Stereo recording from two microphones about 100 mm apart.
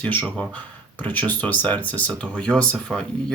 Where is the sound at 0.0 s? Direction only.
15° left (ahead or behind).